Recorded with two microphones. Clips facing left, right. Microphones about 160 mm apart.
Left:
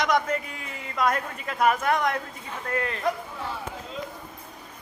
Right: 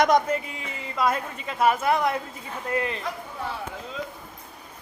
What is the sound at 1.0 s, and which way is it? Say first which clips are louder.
A woman's voice: even; 5° right (ahead or behind).